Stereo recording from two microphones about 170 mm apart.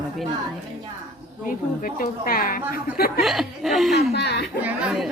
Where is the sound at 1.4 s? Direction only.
55° left (ahead or behind).